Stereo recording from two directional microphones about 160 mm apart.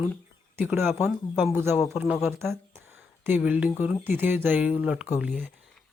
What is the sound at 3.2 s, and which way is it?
Speech, 10° right (ahead or behind).